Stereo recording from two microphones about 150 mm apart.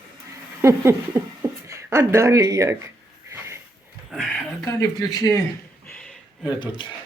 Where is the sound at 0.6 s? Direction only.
15° right (ahead or behind).